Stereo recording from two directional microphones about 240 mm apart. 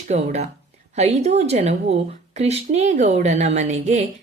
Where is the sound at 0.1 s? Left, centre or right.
Right.